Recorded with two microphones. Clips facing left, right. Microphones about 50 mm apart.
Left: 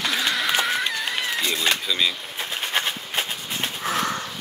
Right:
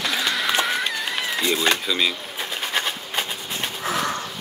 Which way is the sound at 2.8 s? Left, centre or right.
Centre.